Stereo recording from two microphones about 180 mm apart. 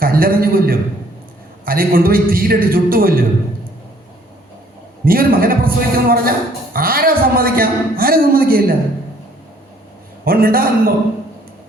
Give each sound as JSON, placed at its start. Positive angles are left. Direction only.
{"t": 0.0, "sound": "a man's voice", "side_deg": -55}
{"t": 5.0, "sound": "a man's voice", "side_deg": -55}
{"t": 10.2, "sound": "a man's voice", "side_deg": -55}